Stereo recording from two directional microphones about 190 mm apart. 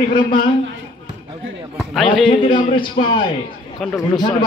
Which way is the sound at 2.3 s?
25° left (ahead or behind).